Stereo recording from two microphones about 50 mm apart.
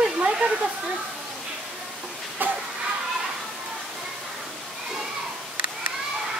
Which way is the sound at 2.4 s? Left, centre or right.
Right.